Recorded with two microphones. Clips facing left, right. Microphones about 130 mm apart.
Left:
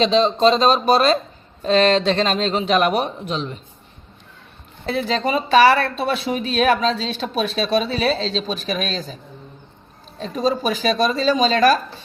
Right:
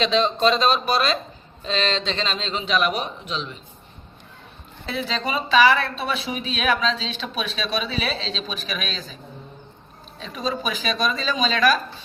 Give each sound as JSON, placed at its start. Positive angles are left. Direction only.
{"t": 0.0, "sound": "a woman's voice", "side_deg": 30}
{"t": 4.9, "sound": "a woman's voice", "side_deg": 45}
{"t": 10.2, "sound": "a woman's voice", "side_deg": 40}